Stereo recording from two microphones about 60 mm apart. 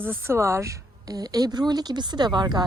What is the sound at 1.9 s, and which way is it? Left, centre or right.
Speech, right.